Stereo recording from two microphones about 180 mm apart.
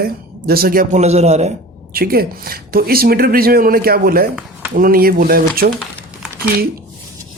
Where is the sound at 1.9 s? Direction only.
55° right (ahead or behind).